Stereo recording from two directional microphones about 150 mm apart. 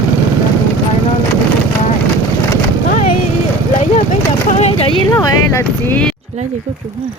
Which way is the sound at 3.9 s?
50° left (ahead or behind).